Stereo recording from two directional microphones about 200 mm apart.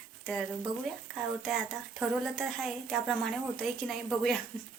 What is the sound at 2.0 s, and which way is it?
A woman's voice, centre (ahead or behind).